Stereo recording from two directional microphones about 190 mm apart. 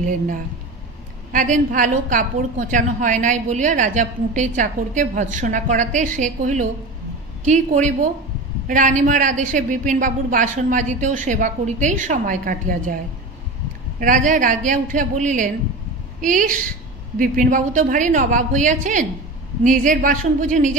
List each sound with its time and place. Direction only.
1.3 s a woman's voice: 45° right (ahead or behind)
13.9 s a woman's voice: 45° right (ahead or behind)